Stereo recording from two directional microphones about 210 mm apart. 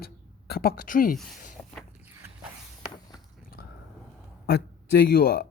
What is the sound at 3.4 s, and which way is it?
Drip, 45° left (ahead or behind).